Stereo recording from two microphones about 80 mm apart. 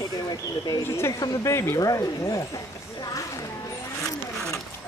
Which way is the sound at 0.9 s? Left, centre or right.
Left.